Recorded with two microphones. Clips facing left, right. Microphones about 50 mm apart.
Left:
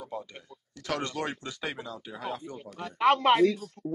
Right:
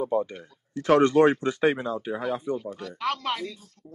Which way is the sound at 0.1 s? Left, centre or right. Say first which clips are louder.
Right 12 dB; right.